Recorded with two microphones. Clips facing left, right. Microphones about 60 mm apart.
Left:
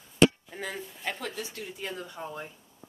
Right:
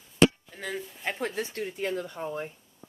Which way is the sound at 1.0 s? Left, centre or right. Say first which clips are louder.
Right 3 dB; right.